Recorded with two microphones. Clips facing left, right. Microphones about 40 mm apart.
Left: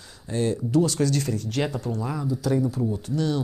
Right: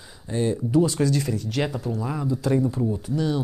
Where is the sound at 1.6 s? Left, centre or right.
Centre.